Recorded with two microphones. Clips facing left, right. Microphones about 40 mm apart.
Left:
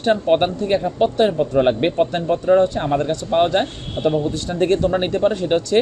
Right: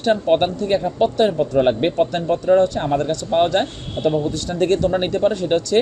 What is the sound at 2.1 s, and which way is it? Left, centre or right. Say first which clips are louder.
Speech: even; centre.